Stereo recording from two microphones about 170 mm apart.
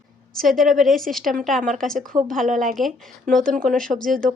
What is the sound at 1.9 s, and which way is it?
Speech, 50° right (ahead or behind).